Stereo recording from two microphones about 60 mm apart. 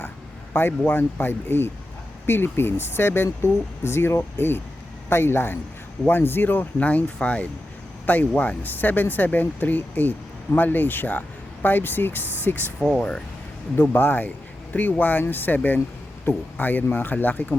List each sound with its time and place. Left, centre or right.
0.9 s speech: left
13.0 s speech: centre
13.9 s speech: left